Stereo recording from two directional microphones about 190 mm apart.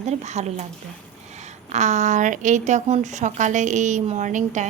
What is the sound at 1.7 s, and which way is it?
Speech, 40° right (ahead or behind).